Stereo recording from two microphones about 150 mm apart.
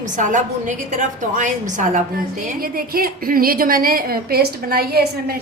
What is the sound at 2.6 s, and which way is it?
A woman's voice, 80° right.